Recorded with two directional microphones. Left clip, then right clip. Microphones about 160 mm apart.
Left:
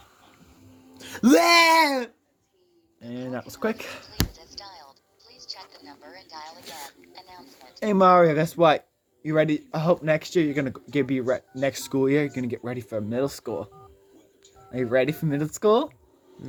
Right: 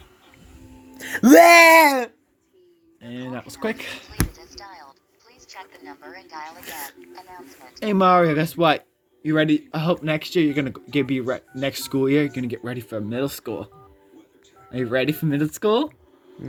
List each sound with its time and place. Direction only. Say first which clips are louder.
0.9 s speech: right 7 dB; 60° right (ahead or behind)
3.0 s speech: even; centre (ahead or behind)
4.1 s basketball bounce: right 1 dB; 10° right (ahead or behind)
5.5 s speech: right 5 dB; 20° right (ahead or behind)
6.7 s speech: right 5 dB; 60° right (ahead or behind)
7.0 s speech: right 5 dB; 15° right (ahead or behind)
7.7 s speech: right 1 dB; 5° left (ahead or behind)
14.7 s speech: even; 10° right (ahead or behind)